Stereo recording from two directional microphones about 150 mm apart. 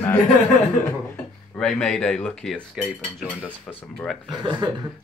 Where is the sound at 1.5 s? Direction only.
5° left (ahead or behind).